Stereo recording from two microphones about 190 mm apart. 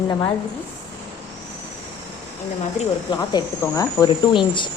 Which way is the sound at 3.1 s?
20° left (ahead or behind).